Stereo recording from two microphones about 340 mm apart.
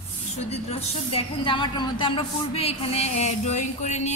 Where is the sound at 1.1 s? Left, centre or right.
Centre.